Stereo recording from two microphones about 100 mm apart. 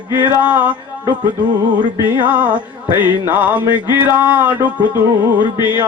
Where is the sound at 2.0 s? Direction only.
15° right (ahead or behind).